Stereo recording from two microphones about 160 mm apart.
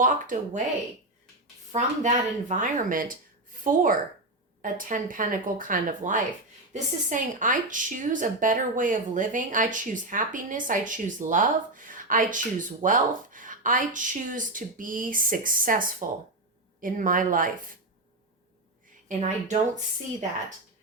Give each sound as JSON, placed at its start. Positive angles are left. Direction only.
{"t": 0.0, "sound": "a woman's voice", "side_deg": -55}
{"t": 1.7, "sound": "a woman's voice", "side_deg": -50}
{"t": 19.0, "sound": "speech", "side_deg": -50}